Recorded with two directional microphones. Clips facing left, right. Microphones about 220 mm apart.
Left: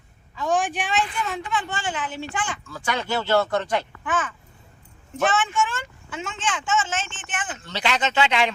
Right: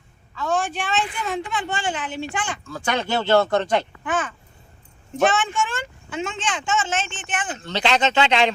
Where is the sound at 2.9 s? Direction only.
25° right (ahead or behind).